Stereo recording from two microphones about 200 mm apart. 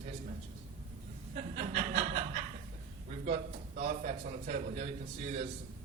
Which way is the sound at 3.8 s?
40° right (ahead or behind).